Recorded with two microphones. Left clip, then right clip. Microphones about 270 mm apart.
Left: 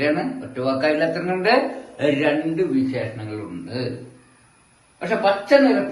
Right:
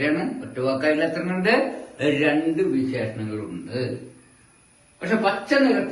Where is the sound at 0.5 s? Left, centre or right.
Left.